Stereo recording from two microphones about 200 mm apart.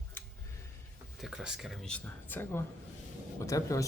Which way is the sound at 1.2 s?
Centre (ahead or behind).